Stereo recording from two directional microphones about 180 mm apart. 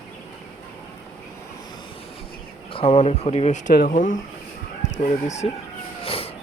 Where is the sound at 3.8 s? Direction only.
50° left (ahead or behind).